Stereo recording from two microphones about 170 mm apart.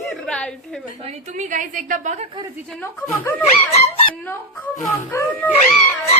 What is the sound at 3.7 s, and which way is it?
Speech, 35° left (ahead or behind).